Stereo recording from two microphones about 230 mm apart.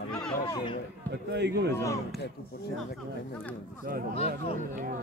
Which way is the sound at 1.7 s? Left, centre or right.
Centre.